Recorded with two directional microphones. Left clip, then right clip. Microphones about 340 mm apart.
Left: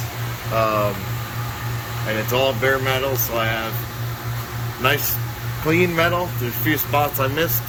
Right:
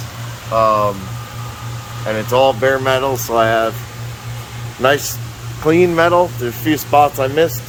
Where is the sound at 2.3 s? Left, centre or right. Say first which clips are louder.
Right 7 dB; centre.